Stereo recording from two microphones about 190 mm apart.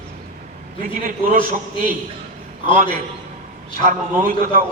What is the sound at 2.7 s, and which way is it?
A man's voice, 45° right (ahead or behind).